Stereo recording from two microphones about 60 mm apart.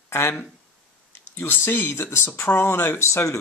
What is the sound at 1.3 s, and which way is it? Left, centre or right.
Speech, left.